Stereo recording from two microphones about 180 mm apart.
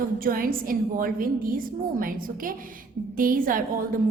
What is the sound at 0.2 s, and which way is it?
A woman's voice, 55° right (ahead or behind).